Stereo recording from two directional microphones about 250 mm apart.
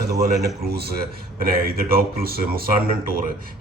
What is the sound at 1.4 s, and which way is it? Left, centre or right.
Speech, right.